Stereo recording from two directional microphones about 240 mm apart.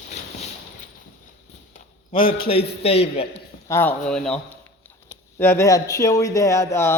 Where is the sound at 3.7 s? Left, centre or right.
Centre.